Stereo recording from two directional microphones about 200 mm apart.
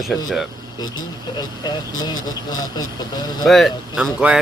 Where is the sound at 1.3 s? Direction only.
20° left (ahead or behind).